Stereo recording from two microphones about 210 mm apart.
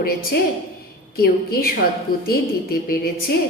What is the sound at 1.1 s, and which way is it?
A woman's voice, 45° left (ahead or behind).